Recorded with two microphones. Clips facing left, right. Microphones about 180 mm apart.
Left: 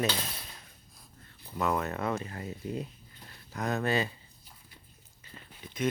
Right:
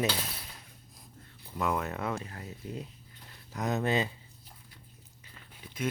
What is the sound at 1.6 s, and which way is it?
Speech, 5° right (ahead or behind).